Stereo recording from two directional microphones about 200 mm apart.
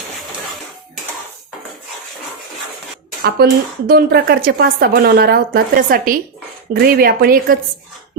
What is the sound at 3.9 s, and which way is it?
A woman's voice, 50° right (ahead or behind).